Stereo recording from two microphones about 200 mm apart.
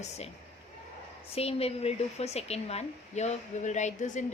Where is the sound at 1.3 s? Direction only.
30° left (ahead or behind).